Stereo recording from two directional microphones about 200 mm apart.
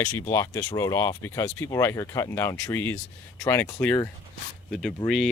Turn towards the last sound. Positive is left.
turn(degrees=0)  # may be behind; listen again after turning